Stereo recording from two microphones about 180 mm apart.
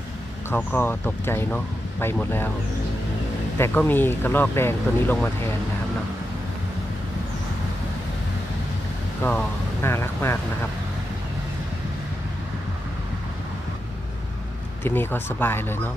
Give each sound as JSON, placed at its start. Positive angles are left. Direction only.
{"t": 0.5, "sound": "speech", "side_deg": 10}
{"t": 3.5, "sound": "speech", "side_deg": 10}
{"t": 9.2, "sound": "speech", "side_deg": 10}
{"t": 14.8, "sound": "speech", "side_deg": 10}